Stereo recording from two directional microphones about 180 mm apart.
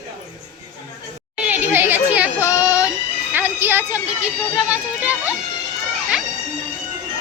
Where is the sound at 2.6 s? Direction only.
10° right (ahead or behind).